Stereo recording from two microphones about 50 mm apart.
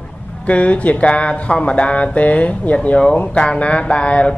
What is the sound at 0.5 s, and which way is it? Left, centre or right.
Speech, left.